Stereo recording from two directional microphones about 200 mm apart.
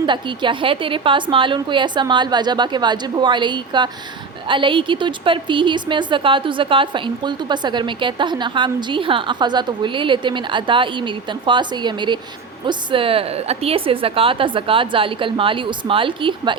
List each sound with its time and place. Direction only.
0.0 s a woman's voice: 25° right (ahead or behind)